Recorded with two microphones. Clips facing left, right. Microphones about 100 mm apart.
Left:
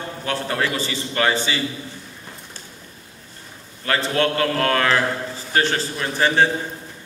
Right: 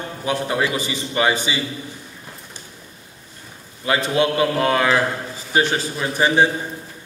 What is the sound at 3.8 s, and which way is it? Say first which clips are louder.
A man's voice: right 2 dB; 15° right (ahead or behind).